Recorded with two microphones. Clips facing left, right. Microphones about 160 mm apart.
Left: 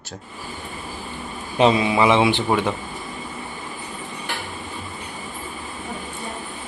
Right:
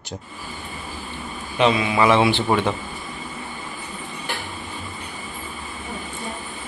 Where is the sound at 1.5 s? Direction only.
35° left (ahead or behind).